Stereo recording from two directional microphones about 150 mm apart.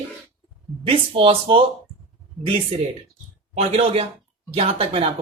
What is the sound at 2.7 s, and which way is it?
Speech, 40° right (ahead or behind).